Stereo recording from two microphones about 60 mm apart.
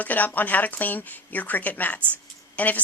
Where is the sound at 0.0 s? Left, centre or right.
Left.